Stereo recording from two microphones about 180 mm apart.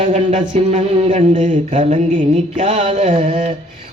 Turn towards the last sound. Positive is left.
turn(degrees=-45)  # may be behind; listen again after turning